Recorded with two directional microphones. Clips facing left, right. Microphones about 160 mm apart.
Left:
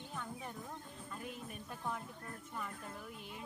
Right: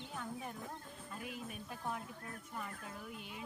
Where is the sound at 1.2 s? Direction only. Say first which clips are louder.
Right 2 dB; 5° right (ahead or behind).